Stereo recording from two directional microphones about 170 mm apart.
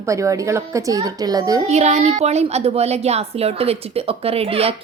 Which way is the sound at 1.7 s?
40° right (ahead or behind).